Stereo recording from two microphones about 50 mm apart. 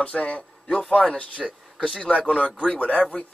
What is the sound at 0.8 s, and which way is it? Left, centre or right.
A man's voice, centre.